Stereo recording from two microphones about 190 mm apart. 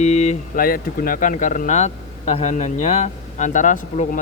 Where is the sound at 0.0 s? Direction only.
35° left (ahead or behind).